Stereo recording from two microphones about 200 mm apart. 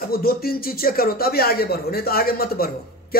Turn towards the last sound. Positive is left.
turn(degrees=50)  # may be behind; listen again after turning